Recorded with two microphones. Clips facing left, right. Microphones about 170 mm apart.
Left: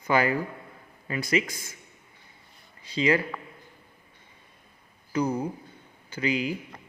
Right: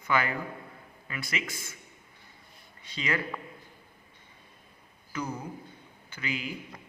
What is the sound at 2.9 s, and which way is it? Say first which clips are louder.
Speech: left 8 dB; 30° left (ahead or behind).